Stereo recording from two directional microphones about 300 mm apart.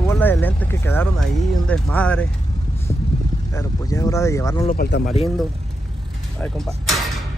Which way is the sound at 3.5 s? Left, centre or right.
Centre.